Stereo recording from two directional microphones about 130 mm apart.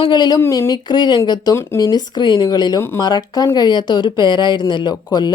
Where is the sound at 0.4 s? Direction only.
20° left (ahead or behind).